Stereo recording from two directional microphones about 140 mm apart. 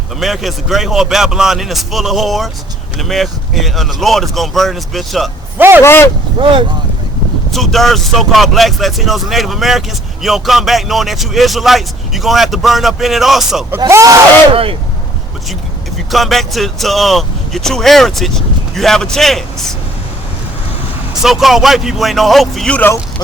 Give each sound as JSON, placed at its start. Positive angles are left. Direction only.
{"t": 0.2, "sound": "speech", "side_deg": 0}
{"t": 5.5, "sound": "speech", "side_deg": -15}
{"t": 5.8, "sound": "speech", "side_deg": 15}
{"t": 6.4, "sound": "speech", "side_deg": -40}
{"t": 7.5, "sound": "speech", "side_deg": 0}
{"t": 13.7, "sound": "speech", "side_deg": -20}
{"t": 14.5, "sound": "speech", "side_deg": -40}
{"t": 16.1, "sound": "speech", "side_deg": 0}
{"t": 21.2, "sound": "speech", "side_deg": -5}